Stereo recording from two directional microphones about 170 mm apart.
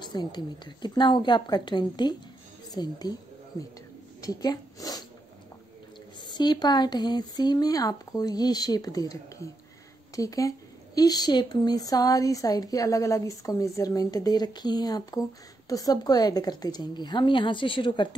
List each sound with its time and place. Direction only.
0.0 s speech: 25° left (ahead or behind)
6.2 s speech: 25° left (ahead or behind)